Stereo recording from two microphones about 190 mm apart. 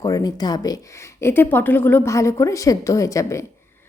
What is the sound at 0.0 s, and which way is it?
A woman's voice, 20° left (ahead or behind).